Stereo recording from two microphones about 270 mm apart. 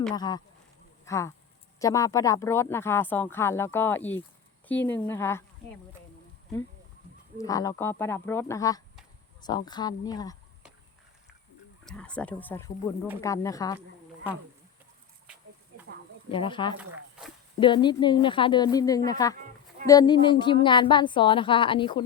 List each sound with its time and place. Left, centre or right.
0.2 s speech: centre
7.3 s speech: centre
11.9 s speech: centre
16.3 s speech: centre